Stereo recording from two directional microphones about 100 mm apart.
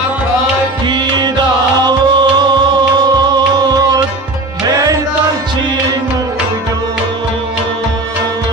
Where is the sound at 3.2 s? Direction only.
40° right (ahead or behind).